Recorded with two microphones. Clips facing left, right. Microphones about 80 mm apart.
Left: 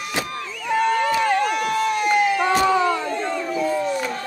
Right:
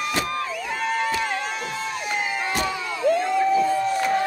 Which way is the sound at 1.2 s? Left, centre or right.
Left.